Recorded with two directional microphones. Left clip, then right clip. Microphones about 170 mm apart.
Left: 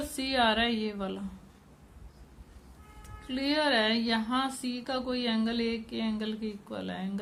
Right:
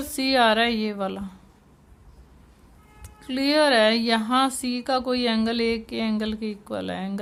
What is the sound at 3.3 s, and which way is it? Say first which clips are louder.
Speech: right 8 dB; 50° right (ahead or behind).